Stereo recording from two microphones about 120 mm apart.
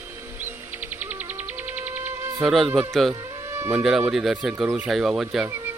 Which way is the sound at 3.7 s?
5° right (ahead or behind).